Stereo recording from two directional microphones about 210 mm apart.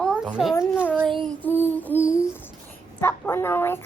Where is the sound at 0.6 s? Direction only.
5° right (ahead or behind).